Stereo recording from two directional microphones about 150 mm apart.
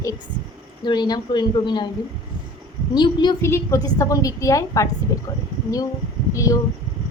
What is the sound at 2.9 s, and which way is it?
Speech, 30° left (ahead or behind).